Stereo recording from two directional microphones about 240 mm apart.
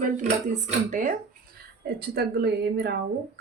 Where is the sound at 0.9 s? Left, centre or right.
Right.